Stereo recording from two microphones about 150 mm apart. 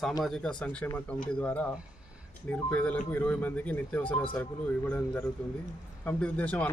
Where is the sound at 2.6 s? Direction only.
10° left (ahead or behind).